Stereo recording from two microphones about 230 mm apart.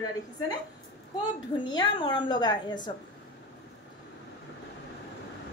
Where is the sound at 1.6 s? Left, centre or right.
Centre.